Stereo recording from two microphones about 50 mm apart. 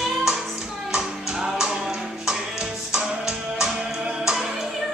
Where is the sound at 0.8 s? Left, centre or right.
Centre.